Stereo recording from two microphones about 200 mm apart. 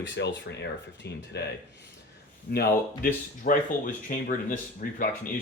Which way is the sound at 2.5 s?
50° left (ahead or behind).